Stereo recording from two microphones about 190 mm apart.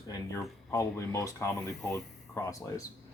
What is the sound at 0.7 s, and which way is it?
Speech, 15° left (ahead or behind).